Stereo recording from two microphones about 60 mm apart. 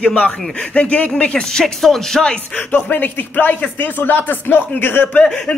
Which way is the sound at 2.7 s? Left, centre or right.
Left.